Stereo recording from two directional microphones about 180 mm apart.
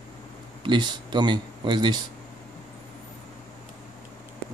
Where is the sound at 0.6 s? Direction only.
25° right (ahead or behind).